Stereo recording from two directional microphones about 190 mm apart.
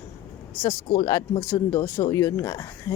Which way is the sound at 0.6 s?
25° left (ahead or behind).